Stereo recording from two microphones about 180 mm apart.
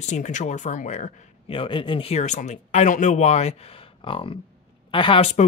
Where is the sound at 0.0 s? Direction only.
40° left (ahead or behind).